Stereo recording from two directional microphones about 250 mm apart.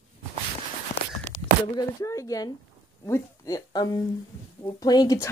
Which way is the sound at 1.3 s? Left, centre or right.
Left.